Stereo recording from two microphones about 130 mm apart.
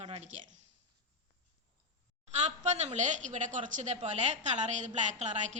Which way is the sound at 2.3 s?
60° right (ahead or behind).